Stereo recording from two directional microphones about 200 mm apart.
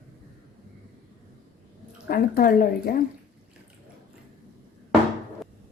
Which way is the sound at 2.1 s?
45° left (ahead or behind).